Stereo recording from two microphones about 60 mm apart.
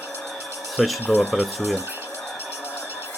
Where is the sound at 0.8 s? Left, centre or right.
Centre.